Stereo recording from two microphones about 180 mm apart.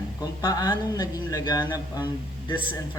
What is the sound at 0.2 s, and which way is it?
Speech, 20° left (ahead or behind).